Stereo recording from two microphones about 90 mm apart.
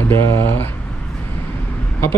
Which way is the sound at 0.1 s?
30° left (ahead or behind).